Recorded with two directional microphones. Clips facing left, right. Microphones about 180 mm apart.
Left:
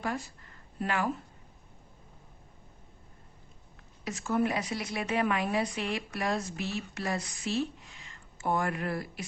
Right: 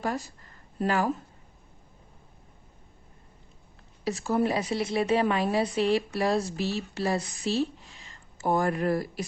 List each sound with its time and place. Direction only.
0.0 s a woman's voice: 40° right (ahead or behind)
4.0 s a woman's voice: 35° right (ahead or behind)